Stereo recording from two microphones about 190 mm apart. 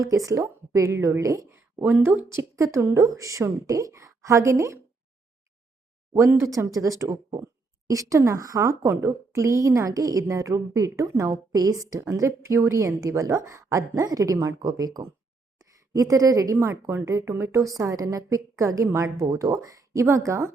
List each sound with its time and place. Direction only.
0.0 s a woman's voice: 15° right (ahead or behind)
6.4 s a woman's voice: 15° right (ahead or behind)